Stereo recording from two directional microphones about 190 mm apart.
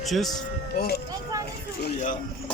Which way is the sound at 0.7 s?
55° left (ahead or behind).